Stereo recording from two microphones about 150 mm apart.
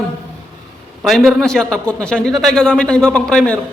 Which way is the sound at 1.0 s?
Centre (ahead or behind).